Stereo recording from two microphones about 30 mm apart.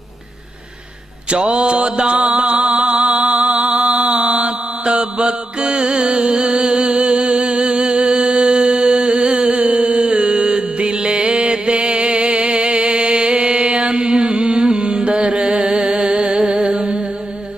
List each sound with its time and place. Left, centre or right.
1.3 s mantra: right
2.7 s music: right
3.0 s music: right
3.9 s mantra: right
7.1 s music: right
9.8 s a sound: right
10.1 s music: right
13.5 s mantra: right
14.8 s music: right
15.9 s music: right
16.2 s music: right